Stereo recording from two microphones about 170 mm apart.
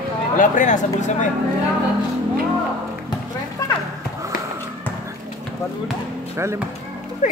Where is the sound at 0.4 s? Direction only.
45° left (ahead or behind).